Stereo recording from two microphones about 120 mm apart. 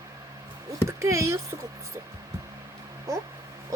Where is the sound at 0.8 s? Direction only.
25° right (ahead or behind).